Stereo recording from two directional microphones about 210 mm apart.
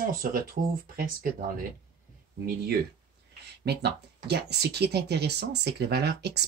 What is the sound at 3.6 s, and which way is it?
Speech, 50° right (ahead or behind).